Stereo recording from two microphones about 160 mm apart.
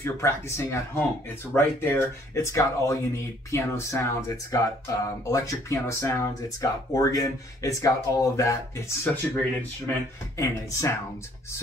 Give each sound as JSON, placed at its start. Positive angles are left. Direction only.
{"t": 0.0, "sound": "speech", "side_deg": 15}